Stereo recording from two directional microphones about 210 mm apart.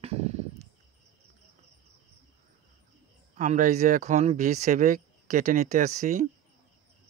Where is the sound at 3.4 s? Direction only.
35° right (ahead or behind).